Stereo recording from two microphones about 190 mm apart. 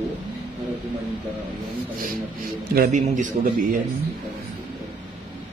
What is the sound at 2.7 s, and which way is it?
Speech, 45° right (ahead or behind).